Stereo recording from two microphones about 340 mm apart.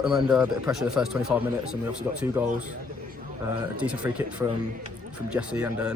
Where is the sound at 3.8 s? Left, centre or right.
Centre.